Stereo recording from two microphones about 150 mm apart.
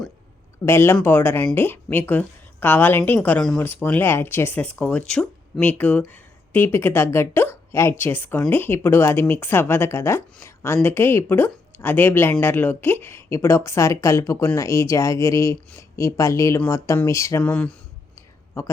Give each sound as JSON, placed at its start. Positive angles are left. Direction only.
{"t": 0.6, "sound": "a woman's voice", "side_deg": 15}
{"t": 17.4, "sound": "speech", "side_deg": 10}